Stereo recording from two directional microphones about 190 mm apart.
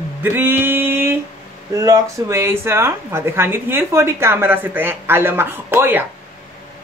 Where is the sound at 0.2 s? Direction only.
10° right (ahead or behind).